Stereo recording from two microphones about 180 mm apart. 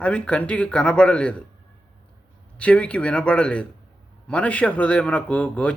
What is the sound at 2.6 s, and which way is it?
A man's voice, 5° left (ahead or behind).